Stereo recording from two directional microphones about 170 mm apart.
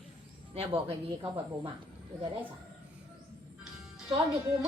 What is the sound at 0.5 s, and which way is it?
Speech, 35° right (ahead or behind).